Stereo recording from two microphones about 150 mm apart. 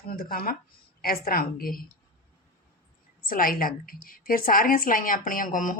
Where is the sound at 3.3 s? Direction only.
70° left (ahead or behind).